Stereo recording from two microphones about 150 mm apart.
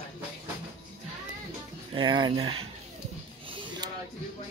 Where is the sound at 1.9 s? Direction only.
30° right (ahead or behind).